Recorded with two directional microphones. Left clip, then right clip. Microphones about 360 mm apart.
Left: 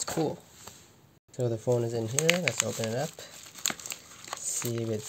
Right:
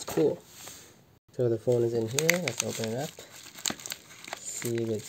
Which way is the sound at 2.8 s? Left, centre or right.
Left.